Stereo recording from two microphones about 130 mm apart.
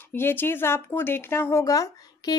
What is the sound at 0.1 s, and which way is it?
Speech, 15° left (ahead or behind).